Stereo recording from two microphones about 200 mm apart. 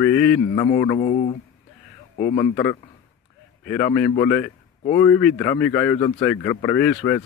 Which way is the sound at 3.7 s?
10° left (ahead or behind).